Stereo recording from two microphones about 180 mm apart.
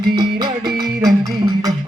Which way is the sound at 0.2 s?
25° right (ahead or behind).